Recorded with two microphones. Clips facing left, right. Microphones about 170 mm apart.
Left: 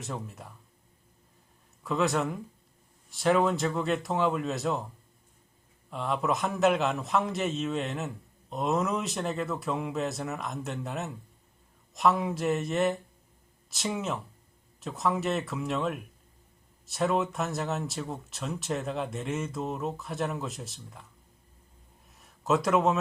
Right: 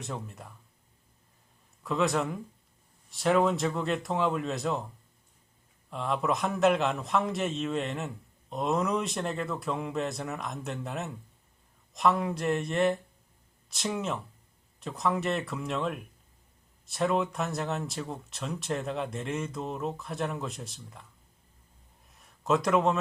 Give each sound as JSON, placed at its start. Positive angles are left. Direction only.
{"t": 0.0, "sound": "a man's voice", "side_deg": 0}
{"t": 1.8, "sound": "a man's voice", "side_deg": 0}
{"t": 5.9, "sound": "a man's voice", "side_deg": 0}
{"t": 22.1, "sound": "a sound", "side_deg": 0}